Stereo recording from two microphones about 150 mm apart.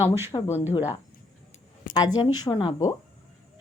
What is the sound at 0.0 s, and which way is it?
Speech, 15° right (ahead or behind).